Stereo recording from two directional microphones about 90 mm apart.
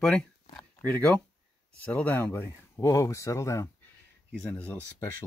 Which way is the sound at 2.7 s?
35° left (ahead or behind).